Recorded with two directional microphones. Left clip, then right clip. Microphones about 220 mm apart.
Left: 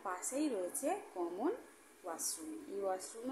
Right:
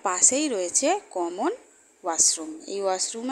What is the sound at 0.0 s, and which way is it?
Speech, 35° right (ahead or behind).